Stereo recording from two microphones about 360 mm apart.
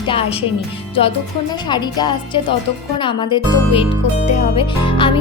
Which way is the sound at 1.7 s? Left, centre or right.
Centre.